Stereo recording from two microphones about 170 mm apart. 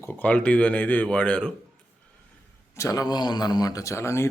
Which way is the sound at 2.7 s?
20° left (ahead or behind).